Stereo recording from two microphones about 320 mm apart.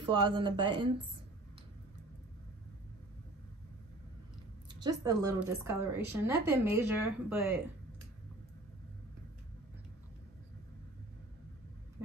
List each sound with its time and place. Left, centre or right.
0.0 s speech: centre
5.0 s speech: centre